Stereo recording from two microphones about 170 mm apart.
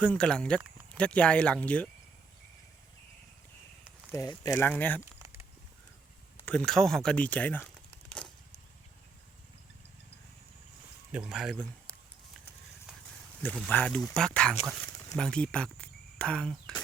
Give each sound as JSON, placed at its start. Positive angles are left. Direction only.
{"t": 0.0, "sound": "speech", "side_deg": 5}
{"t": 4.1, "sound": "speech", "side_deg": 20}
{"t": 5.2, "sound": "a sound", "side_deg": -15}
{"t": 6.7, "sound": "speech", "side_deg": 0}
{"t": 8.2, "sound": "a sound", "side_deg": 5}
{"t": 11.1, "sound": "speech", "side_deg": -5}
{"t": 13.4, "sound": "speech", "side_deg": 10}